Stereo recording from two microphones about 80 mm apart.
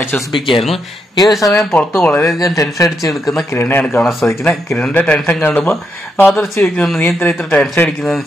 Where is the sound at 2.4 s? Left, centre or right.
Left.